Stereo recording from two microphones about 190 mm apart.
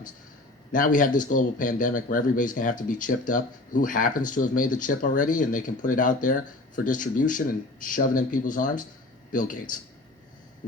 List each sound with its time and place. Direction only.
0.7 s speech: 45° left (ahead or behind)